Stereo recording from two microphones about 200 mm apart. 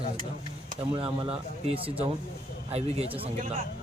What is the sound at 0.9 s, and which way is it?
A man's voice, 30° right (ahead or behind).